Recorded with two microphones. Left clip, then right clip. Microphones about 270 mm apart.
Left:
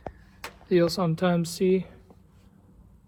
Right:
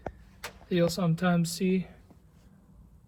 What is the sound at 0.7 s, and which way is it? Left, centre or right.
Speech, left.